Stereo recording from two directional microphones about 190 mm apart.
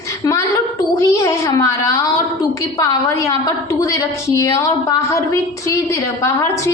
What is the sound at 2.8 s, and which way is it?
A woman's voice, 15° left (ahead or behind).